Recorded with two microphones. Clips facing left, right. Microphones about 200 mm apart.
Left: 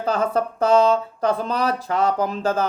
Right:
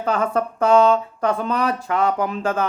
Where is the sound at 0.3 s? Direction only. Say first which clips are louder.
Right 1 dB; 35° left (ahead or behind).